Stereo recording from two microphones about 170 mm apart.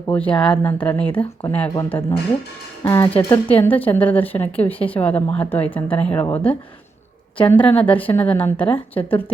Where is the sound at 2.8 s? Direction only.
20° left (ahead or behind).